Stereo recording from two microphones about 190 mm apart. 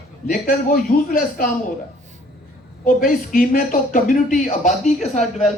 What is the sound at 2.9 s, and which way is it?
Speech, 45° left (ahead or behind).